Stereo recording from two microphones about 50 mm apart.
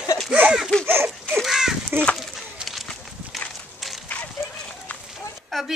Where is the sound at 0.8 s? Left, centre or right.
Right.